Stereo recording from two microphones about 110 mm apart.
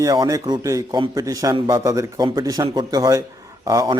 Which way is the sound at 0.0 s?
30° right (ahead or behind).